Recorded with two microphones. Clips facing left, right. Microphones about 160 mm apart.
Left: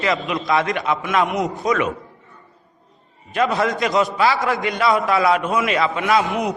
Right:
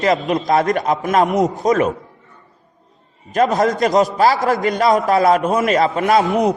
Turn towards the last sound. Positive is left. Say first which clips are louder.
# right 6 dB
turn(degrees=0)  # may be behind; listen again after turning